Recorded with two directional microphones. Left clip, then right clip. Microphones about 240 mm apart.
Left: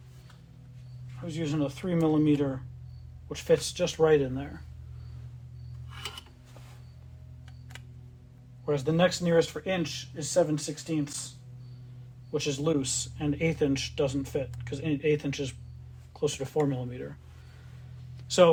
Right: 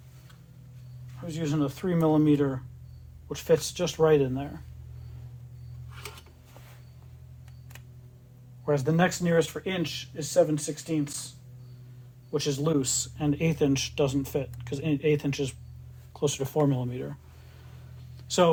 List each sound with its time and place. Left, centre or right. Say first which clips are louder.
1.2 s speech: right 1 dB; right
8.6 s speech: even; right
12.3 s speech: right 1 dB; right
18.3 s speech: left 3 dB; right